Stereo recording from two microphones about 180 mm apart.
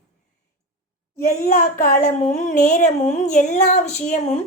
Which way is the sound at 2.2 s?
40° left (ahead or behind).